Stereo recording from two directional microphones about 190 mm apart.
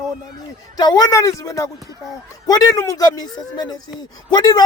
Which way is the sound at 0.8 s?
20° left (ahead or behind).